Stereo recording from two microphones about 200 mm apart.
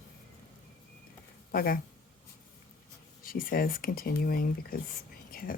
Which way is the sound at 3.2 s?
45° left (ahead or behind).